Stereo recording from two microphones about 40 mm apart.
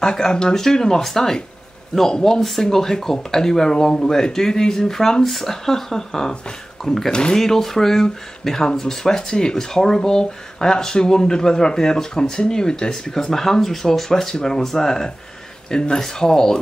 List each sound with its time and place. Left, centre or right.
0.0 s speech: centre
7.1 s speech: left
7.3 s speech: centre